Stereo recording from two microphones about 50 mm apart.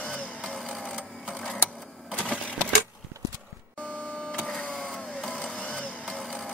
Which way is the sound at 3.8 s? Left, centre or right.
Left.